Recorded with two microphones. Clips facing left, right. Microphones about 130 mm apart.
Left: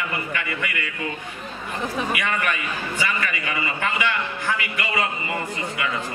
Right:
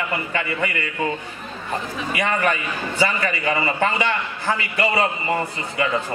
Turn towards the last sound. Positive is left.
turn(degrees=-35)  # may be behind; listen again after turning